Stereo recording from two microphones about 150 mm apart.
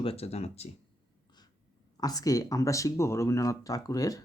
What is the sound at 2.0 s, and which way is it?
Speech, 25° left (ahead or behind).